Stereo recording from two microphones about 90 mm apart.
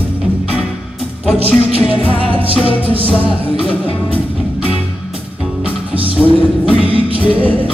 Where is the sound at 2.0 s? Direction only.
90° right.